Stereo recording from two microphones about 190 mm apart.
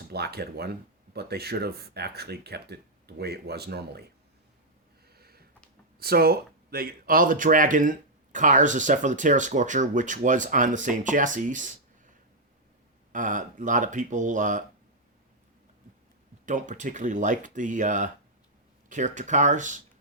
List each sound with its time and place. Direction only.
0.1 s speech: 55° right (ahead or behind)
5.0 s a sound: 55° right (ahead or behind)
6.0 s speech: 55° right (ahead or behind)
13.1 s speech: 45° right (ahead or behind)
16.5 s speech: 40° right (ahead or behind)